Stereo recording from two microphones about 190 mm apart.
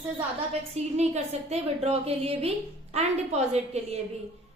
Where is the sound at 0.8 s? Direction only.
35° right (ahead or behind).